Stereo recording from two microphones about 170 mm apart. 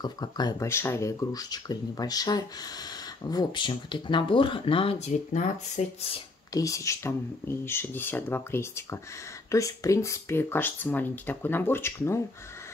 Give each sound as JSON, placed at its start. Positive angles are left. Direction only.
{"t": 0.0, "sound": "speech", "side_deg": 25}
{"t": 6.5, "sound": "speech", "side_deg": 20}